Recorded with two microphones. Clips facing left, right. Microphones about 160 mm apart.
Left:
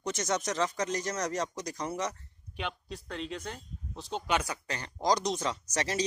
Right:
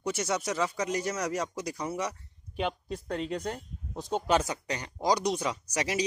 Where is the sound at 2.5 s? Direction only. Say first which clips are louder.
Right 6 dB; 45° right (ahead or behind).